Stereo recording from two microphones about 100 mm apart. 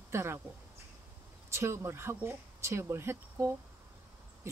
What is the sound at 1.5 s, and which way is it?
Speech, 25° right (ahead or behind).